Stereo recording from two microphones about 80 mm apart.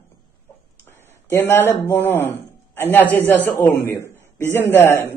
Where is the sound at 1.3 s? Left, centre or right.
Left.